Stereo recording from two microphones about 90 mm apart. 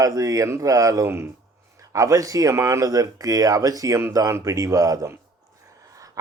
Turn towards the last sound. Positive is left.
turn(degrees=-40)  # may be behind; listen again after turning